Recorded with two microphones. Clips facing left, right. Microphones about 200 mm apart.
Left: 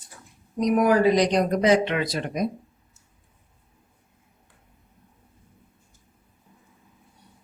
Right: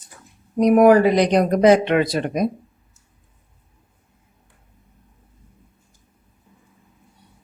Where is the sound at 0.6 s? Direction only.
60° right (ahead or behind).